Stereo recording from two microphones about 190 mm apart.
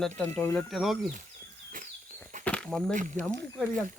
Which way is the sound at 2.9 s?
40° right (ahead or behind).